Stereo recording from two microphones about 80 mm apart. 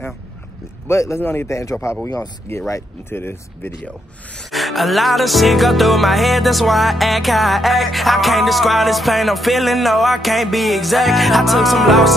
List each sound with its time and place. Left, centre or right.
0.8 s speech: left
4.5 s music: centre